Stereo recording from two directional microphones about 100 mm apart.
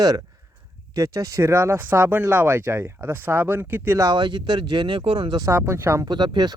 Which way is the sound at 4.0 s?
45° right (ahead or behind).